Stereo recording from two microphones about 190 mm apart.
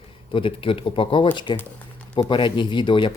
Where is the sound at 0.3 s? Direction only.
30° left (ahead or behind).